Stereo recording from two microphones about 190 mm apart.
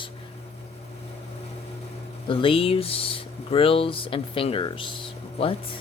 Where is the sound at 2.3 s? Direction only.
25° left (ahead or behind).